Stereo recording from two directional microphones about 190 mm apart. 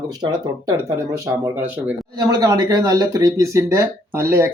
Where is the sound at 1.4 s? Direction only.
15° right (ahead or behind).